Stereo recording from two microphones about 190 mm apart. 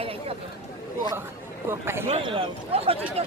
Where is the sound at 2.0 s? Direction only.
30° right (ahead or behind).